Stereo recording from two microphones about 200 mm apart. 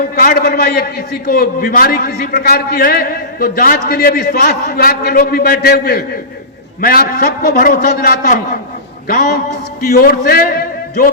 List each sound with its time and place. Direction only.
0.2 s a man's voice: 50° left (ahead or behind)